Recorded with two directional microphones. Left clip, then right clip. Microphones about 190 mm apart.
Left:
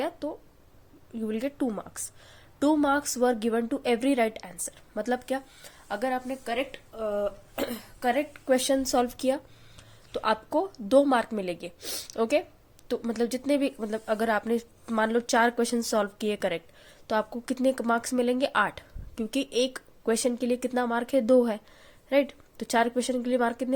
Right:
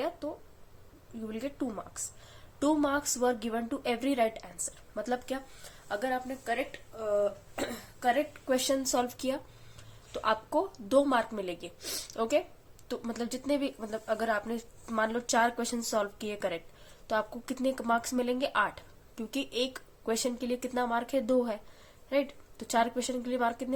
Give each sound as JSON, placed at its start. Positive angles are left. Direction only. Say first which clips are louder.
{"t": 0.2, "sound": "a woman's voice", "louder": "left 4 dB", "side_deg": 35}